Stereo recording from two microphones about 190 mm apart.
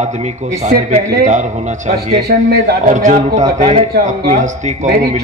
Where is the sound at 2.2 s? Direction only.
60° right (ahead or behind).